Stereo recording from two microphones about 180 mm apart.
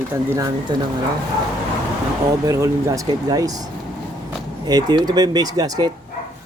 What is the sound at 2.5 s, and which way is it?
Speech, 15° right (ahead or behind).